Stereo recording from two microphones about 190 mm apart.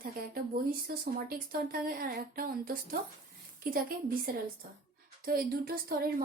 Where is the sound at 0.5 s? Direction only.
50° right (ahead or behind).